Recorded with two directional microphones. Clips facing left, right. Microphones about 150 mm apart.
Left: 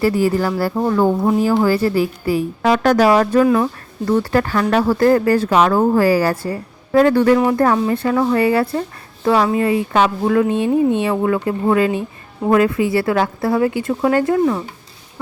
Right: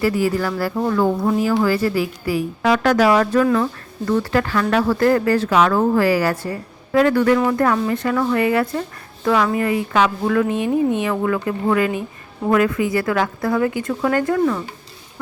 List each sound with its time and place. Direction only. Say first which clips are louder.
0.0 s speech: left 3 dB; 30° left (ahead or behind)
3.4 s speech: left 3 dB; 25° left (ahead or behind)